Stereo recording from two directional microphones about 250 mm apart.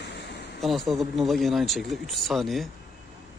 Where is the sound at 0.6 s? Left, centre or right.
Centre.